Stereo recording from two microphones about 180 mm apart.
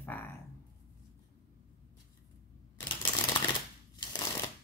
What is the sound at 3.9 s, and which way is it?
Shuffling cards, 25° left (ahead or behind).